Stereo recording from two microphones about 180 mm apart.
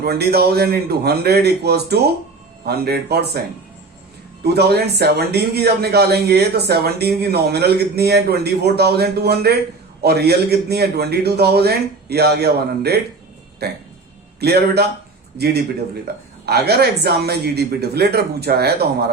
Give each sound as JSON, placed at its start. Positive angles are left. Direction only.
{"t": 0.0, "sound": "speech", "side_deg": -60}
{"t": 4.4, "sound": "speech", "side_deg": -65}
{"t": 16.5, "sound": "speech", "side_deg": -65}